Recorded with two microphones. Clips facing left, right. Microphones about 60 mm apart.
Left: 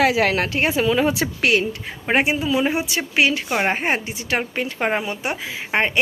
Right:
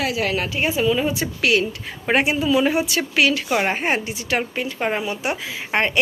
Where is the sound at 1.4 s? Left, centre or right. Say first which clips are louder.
Right 1 dB; left.